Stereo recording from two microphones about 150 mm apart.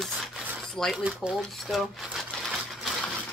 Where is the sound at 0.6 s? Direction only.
Centre (ahead or behind).